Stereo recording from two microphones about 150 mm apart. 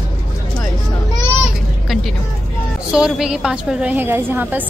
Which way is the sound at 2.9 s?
5° right (ahead or behind).